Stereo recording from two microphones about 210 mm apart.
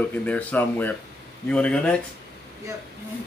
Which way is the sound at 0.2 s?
5° left (ahead or behind).